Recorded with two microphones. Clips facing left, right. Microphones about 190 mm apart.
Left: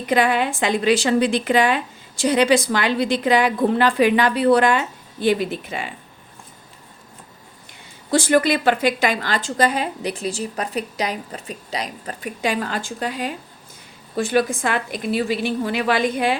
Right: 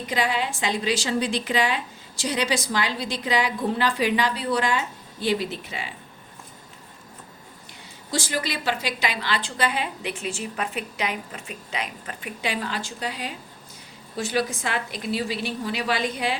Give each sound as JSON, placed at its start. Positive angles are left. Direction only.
{"t": 0.1, "sound": "a woman's voice", "side_deg": 55}
{"t": 8.1, "sound": "a woman's voice", "side_deg": 55}